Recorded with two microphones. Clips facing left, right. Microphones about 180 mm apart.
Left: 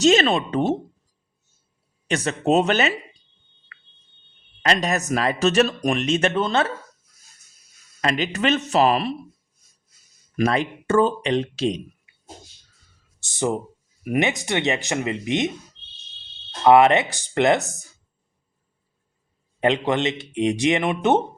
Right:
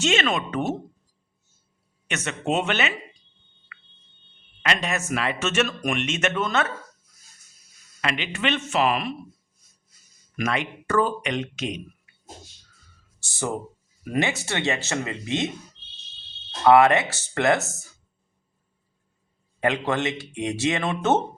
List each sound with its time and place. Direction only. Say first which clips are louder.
0.0 s speech: left 6 dB; 35° left (ahead or behind)
2.0 s speech: left 6 dB; 35° left (ahead or behind)
3.7 s a sound: right 2 dB; 35° left (ahead or behind)
4.6 s speech: left 4 dB; 40° left (ahead or behind)
8.0 s speech: left 5 dB; 40° left (ahead or behind)
10.3 s speech: left 5 dB; 35° left (ahead or behind)
13.1 s speech: left 5 dB; 20° left (ahead or behind)
16.6 s speech: left 2 dB; 20° left (ahead or behind)
19.5 s speech: left 3 dB; 20° left (ahead or behind)